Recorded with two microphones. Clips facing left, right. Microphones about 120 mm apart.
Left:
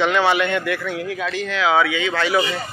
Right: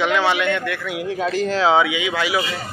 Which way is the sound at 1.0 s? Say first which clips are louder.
Right 4 dB; 35° right (ahead or behind).